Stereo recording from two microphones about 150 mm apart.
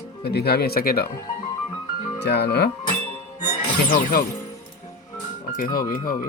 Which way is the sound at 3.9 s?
80° left.